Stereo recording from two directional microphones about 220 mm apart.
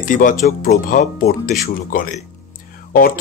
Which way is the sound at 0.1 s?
35° left (ahead or behind).